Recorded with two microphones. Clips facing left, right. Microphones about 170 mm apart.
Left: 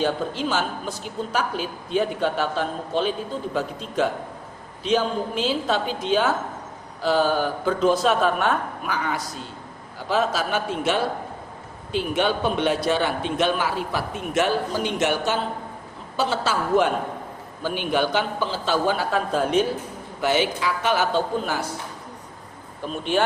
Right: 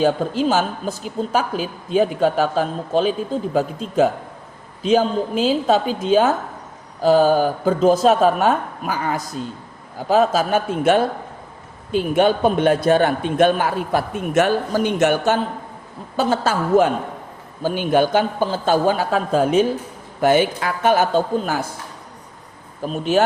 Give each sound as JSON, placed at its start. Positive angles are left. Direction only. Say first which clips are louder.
{"t": 0.0, "sound": "a man's voice", "louder": "right 6 dB", "side_deg": -45}
{"t": 22.8, "sound": "speech", "louder": "right 5 dB", "side_deg": -40}